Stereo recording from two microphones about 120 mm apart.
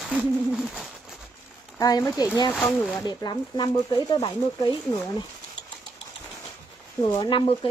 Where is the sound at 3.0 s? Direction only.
35° left (ahead or behind).